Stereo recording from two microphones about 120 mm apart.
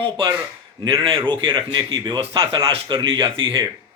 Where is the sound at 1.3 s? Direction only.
40° right (ahead or behind).